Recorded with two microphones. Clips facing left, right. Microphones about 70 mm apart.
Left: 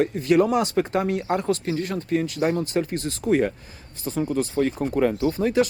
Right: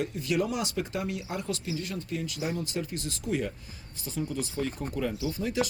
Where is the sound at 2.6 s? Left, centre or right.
Left.